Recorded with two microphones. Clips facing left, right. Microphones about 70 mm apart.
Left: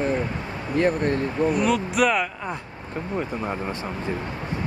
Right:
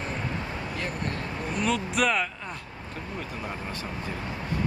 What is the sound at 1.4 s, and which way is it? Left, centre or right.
Speech, centre.